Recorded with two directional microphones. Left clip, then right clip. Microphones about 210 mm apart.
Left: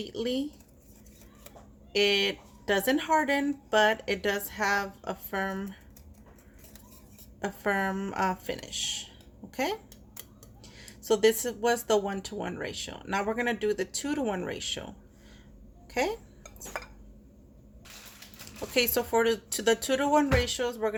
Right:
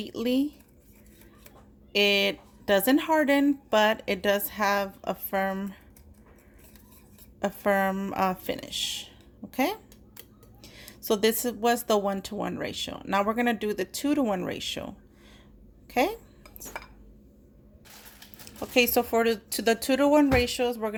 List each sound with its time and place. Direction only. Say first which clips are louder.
0.0 s speech: right 4 dB; 35° right (ahead or behind)
1.9 s speech: right 2 dB; 35° right (ahead or behind)
7.4 s speech: right 4 dB; 35° right (ahead or behind)
15.9 s speech: right 4 dB; 35° right (ahead or behind)
18.7 s speech: right 3 dB; 30° right (ahead or behind)